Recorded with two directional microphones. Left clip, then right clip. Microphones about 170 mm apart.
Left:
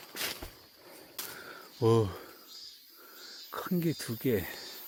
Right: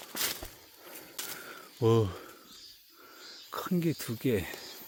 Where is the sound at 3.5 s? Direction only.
10° right (ahead or behind).